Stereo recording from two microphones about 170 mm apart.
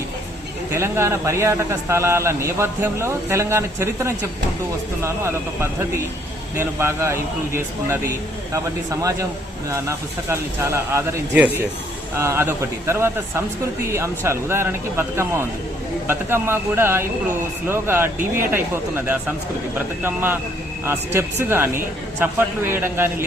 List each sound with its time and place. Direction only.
0.7 s a man's voice: 15° right (ahead or behind)